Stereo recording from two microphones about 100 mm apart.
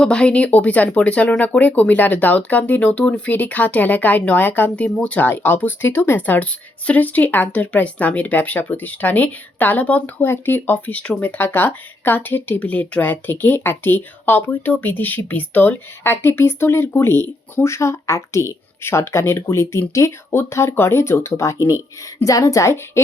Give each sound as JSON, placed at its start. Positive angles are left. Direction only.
{"t": 0.0, "sound": "a woman's voice", "side_deg": 10}